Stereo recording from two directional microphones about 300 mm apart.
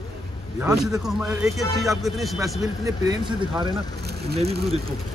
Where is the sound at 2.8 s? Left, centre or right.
Centre.